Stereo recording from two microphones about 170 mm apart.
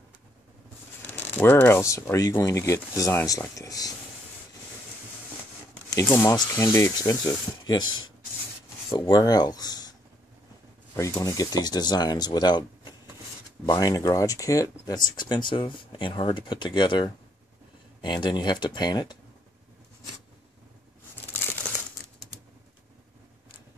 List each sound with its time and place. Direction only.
1.0 s speech: 10° left (ahead or behind)
5.9 s speech: 15° left (ahead or behind)
8.9 s speech: 25° left (ahead or behind)
11.0 s speech: 15° left (ahead or behind)
21.3 s crumpling: 10° left (ahead or behind)